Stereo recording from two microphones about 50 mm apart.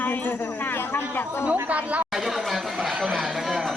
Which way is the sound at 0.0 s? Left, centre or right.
Left.